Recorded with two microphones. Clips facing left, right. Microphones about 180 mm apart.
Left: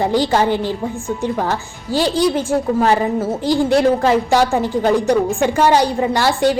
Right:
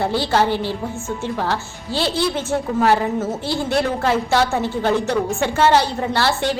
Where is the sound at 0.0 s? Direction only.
15° left (ahead or behind).